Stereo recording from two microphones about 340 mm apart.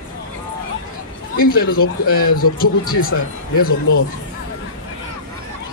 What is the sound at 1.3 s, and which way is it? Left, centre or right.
A man's voice, left.